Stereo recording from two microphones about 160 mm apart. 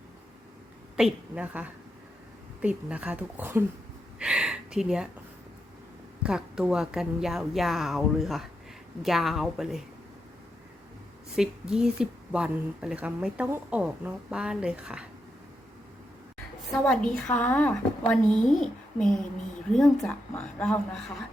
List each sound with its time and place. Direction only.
0.9 s a woman's voice: 5° right (ahead or behind)
6.2 s speech: 5° right (ahead or behind)
11.3 s a woman's voice: 5° right (ahead or behind)
16.9 s speech: 5° left (ahead or behind)